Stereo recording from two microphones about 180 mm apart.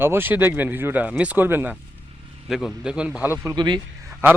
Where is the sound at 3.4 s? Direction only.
25° right (ahead or behind).